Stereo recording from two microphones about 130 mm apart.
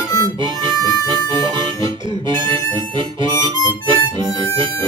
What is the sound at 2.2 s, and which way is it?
Music, 40° right (ahead or behind).